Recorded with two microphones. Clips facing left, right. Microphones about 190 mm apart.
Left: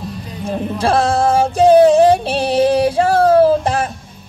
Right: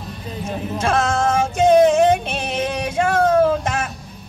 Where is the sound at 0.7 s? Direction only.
35° left (ahead or behind).